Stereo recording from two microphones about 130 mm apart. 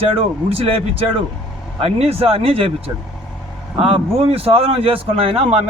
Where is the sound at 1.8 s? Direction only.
50° right (ahead or behind).